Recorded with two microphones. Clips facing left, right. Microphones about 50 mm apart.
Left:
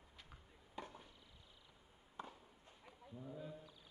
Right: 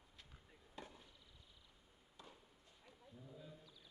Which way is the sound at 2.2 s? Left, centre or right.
Left.